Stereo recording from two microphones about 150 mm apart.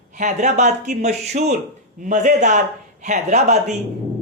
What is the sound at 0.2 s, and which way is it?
A woman's voice, 55° right (ahead or behind).